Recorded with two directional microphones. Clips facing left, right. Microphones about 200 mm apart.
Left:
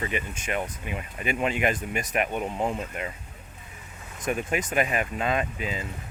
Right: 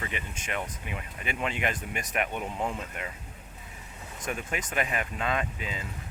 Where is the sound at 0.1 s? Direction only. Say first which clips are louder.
Left 5 dB; 10° left (ahead or behind).